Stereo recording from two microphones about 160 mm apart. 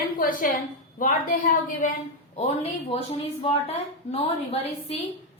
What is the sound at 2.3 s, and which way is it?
A woman's voice, 40° left (ahead or behind).